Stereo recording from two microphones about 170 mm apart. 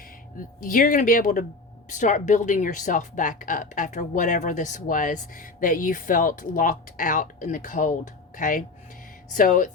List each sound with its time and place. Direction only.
0.3 s speech: 55° left (ahead or behind)
1.9 s speech: 45° left (ahead or behind)